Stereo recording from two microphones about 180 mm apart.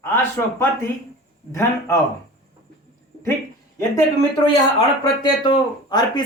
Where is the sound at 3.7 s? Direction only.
20° left (ahead or behind).